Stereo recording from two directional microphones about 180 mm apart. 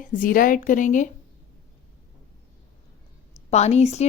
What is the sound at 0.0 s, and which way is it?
Speech, 45° left (ahead or behind).